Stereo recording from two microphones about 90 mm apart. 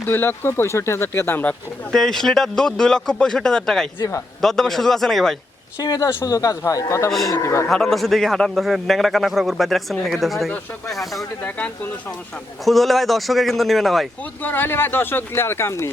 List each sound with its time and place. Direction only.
0.1 s speech: 25° left (ahead or behind)
1.9 s a man's voice: 5° left (ahead or behind)
5.8 s speech: 40° left (ahead or behind)
7.7 s a man's voice: 5° left (ahead or behind)
11.4 s speech: 15° left (ahead or behind)
12.6 s a man's voice: centre (ahead or behind)
14.4 s speech: 20° left (ahead or behind)